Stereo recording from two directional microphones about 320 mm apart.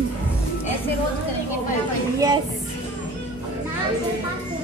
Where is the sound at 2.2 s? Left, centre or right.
Centre.